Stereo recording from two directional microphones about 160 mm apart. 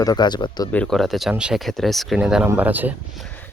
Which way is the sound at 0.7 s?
5° left (ahead or behind).